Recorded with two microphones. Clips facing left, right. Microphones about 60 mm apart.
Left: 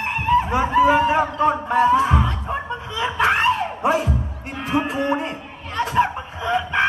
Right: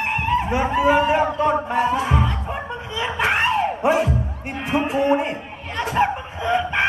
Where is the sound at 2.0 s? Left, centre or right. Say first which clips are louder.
Left 1 dB; right.